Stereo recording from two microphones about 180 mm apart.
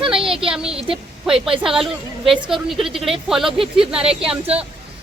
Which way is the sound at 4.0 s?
35° right (ahead or behind).